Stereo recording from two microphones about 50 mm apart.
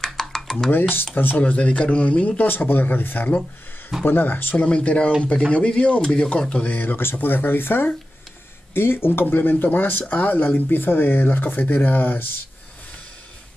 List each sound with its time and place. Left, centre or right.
0.0 s a sound: centre
0.7 s speech: left
1.4 s speech: left
2.4 s speech: left
4.6 s speech: left
6.5 s speech: left
11.6 s speech: left